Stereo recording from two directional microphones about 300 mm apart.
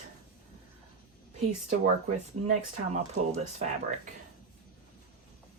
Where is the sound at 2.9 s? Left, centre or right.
Right.